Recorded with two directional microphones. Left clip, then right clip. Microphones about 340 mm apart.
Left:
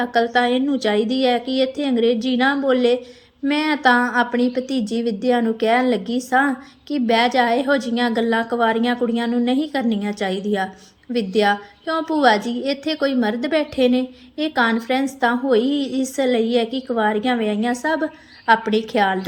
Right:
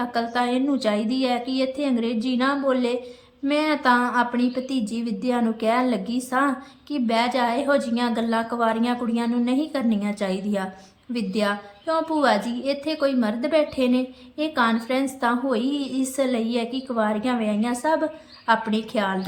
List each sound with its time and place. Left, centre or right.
0.0 s a woman's voice: centre